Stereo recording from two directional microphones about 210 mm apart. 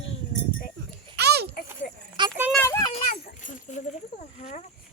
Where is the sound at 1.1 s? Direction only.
50° right (ahead or behind).